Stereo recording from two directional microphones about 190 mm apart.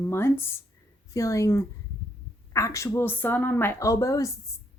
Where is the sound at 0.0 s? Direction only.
15° left (ahead or behind).